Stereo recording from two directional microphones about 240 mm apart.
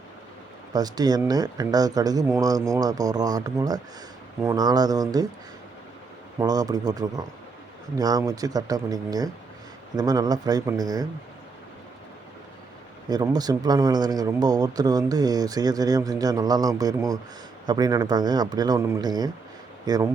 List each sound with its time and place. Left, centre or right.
0.7 s speech: centre
6.4 s speech: centre
13.1 s speech: centre